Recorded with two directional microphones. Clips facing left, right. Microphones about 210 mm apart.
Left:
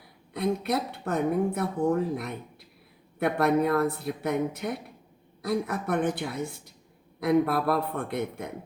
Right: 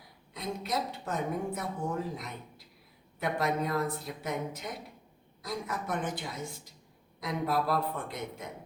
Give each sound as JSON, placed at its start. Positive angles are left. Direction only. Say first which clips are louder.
{"t": 0.3, "sound": "speech", "louder": "left 7 dB", "side_deg": 60}